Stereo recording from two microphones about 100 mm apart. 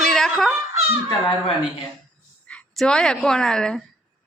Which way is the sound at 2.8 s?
5° left (ahead or behind).